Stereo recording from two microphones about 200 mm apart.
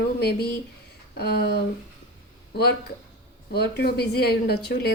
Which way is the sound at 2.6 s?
55° left (ahead or behind).